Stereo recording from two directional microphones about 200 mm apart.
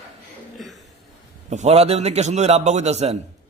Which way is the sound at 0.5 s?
Centre (ahead or behind).